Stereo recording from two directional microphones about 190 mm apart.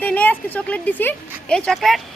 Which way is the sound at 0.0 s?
10° left (ahead or behind).